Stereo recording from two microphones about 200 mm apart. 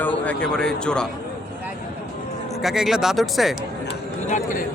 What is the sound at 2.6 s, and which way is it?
Speech, centre (ahead or behind).